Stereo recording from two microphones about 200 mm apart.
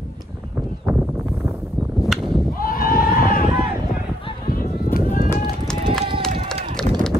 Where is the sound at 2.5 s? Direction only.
45° left (ahead or behind).